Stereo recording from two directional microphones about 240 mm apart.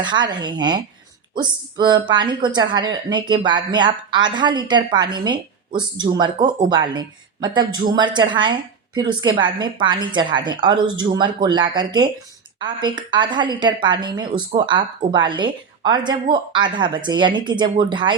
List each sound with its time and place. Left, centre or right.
0.0 s a woman's voice: centre